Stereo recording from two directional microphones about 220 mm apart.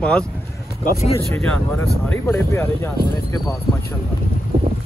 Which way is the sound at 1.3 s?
10° left (ahead or behind).